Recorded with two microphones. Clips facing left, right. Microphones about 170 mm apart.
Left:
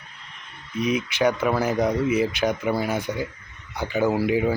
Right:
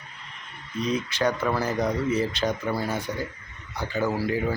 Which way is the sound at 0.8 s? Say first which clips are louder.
Left 3 dB; 15° left (ahead or behind).